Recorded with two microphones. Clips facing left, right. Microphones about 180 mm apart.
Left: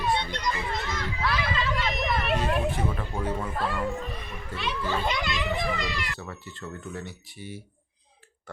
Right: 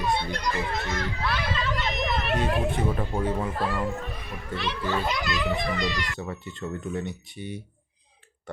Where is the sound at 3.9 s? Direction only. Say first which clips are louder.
Even; centre (ahead or behind).